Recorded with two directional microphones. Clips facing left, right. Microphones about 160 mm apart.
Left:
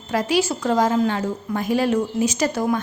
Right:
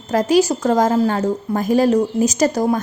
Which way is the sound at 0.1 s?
40° right (ahead or behind).